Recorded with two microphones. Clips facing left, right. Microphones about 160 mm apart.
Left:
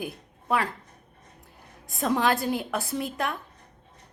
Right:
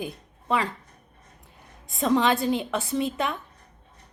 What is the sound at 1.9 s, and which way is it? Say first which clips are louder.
A woman's voice: right 2 dB; 5° left (ahead or behind).